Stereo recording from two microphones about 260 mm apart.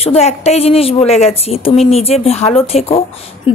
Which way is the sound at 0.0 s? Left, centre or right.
Left.